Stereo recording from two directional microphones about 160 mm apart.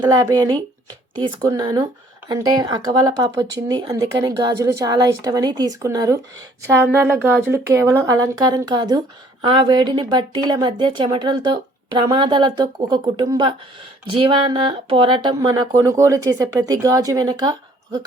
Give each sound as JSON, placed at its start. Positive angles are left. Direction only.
{"t": 0.0, "sound": "a woman's voice", "side_deg": -25}